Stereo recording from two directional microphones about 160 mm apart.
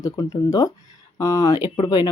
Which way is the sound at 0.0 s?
20° left (ahead or behind).